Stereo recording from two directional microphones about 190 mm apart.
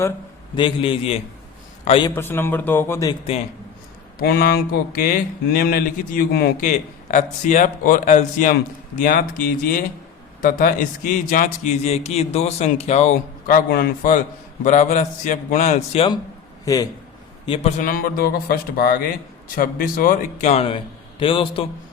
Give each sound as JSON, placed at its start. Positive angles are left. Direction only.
{"t": 0.5, "sound": "a man's voice", "side_deg": 25}
{"t": 2.0, "sound": "speech", "side_deg": 10}
{"t": 4.2, "sound": "a man's voice", "side_deg": 55}
{"t": 13.7, "sound": "a man's voice", "side_deg": 50}
{"t": 16.6, "sound": "a man's voice", "side_deg": 20}
{"t": 17.4, "sound": "a man's voice", "side_deg": 30}